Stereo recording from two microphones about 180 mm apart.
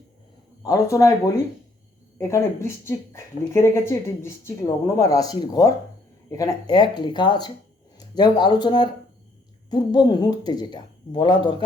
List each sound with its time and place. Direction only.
0.6 s speech: 20° left (ahead or behind)
2.1 s speech: 15° left (ahead or behind)